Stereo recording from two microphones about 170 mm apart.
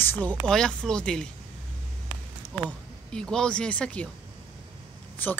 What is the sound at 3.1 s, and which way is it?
Speech, 5° left (ahead or behind).